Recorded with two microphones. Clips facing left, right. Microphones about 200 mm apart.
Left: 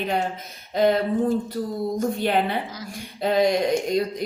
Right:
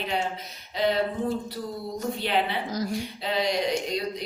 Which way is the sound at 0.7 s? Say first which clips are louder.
Left 6 dB; 50° left (ahead or behind).